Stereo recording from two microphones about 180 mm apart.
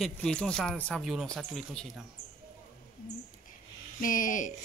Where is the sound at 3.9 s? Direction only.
45° left (ahead or behind).